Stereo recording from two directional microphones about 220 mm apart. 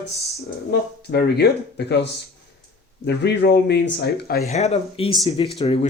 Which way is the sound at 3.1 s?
50° left (ahead or behind).